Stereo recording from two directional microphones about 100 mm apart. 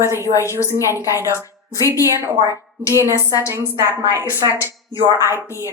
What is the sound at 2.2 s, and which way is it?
Speech, 30° right (ahead or behind).